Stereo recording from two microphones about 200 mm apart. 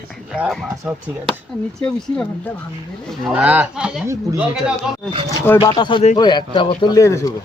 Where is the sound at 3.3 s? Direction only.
5° right (ahead or behind).